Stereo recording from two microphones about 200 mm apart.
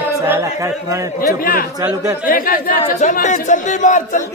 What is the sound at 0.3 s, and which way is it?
Speech, 15° right (ahead or behind).